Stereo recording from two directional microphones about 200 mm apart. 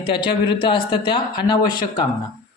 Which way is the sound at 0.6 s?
25° left (ahead or behind).